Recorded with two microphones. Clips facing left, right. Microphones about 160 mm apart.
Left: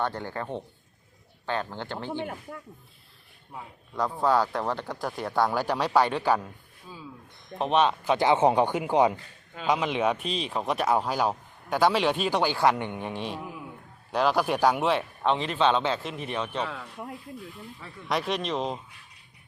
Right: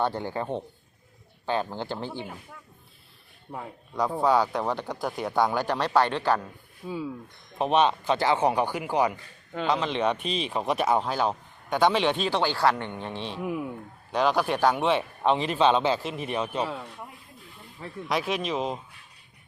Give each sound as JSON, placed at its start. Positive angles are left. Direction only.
{"t": 0.0, "sound": "a man's voice", "side_deg": -15}
{"t": 3.9, "sound": "speech", "side_deg": 0}
{"t": 7.6, "sound": "speech", "side_deg": 0}
{"t": 8.3, "sound": "speech", "side_deg": 20}
{"t": 9.6, "sound": "speech", "side_deg": 10}
{"t": 15.2, "sound": "a man's voice", "side_deg": -5}
{"t": 16.6, "sound": "speech", "side_deg": -25}
{"t": 18.1, "sound": "speech", "side_deg": 0}